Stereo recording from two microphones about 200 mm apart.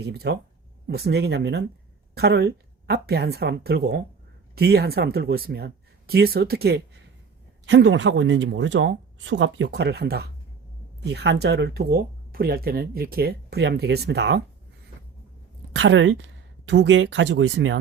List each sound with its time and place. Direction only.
0.0 s speech: 55° right (ahead or behind)
7.6 s speech: 65° right (ahead or behind)
15.7 s a woman's voice: 60° right (ahead or behind)